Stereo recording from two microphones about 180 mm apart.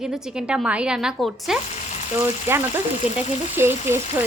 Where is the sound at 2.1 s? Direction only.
15° right (ahead or behind).